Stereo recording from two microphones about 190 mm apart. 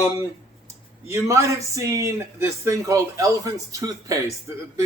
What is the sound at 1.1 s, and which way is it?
A man's voice, 15° right (ahead or behind).